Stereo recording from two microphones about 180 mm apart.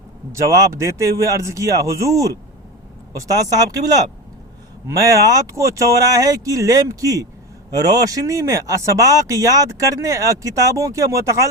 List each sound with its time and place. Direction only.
0.3 s speech: 15° right (ahead or behind)
3.2 s speech: 20° right (ahead or behind)